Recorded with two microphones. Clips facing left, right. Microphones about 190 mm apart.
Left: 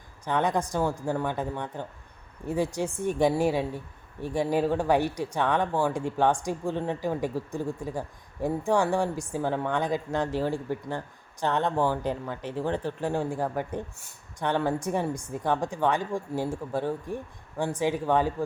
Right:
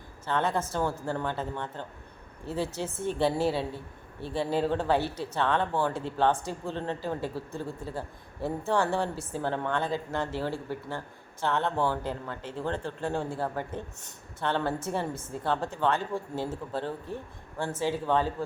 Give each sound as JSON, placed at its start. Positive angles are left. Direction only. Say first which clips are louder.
{"t": 0.3, "sound": "speech", "louder": "left 2 dB", "side_deg": 15}